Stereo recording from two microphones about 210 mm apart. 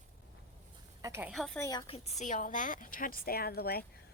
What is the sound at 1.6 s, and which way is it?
Speech, 20° left (ahead or behind).